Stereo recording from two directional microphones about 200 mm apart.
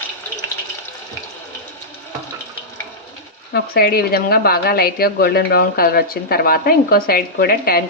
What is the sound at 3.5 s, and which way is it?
A woman's voice, 50° left (ahead or behind).